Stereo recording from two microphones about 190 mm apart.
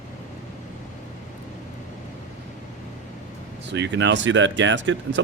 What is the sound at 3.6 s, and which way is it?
Speech, 70° right (ahead or behind).